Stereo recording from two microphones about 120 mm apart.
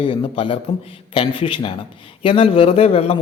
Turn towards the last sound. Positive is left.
turn(degrees=55)  # may be behind; listen again after turning